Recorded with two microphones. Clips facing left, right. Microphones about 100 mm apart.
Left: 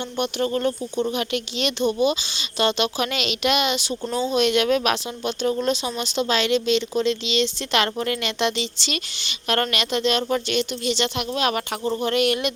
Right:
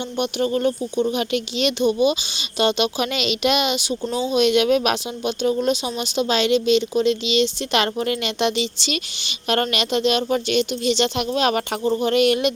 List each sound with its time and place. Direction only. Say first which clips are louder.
0.2 s speech: right 2 dB; 15° right (ahead or behind)
11.8 s speech: right 4 dB; 15° right (ahead or behind)